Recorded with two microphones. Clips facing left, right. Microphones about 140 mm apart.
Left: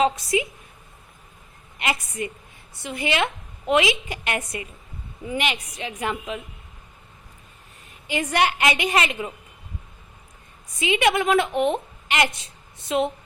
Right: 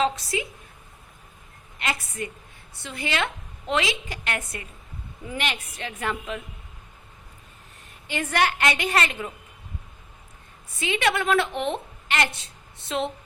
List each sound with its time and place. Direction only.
0.0 s a woman's voice: 15° left (ahead or behind)
1.8 s a woman's voice: 15° left (ahead or behind)
8.0 s a woman's voice: 10° left (ahead or behind)
10.8 s a woman's voice: 10° left (ahead or behind)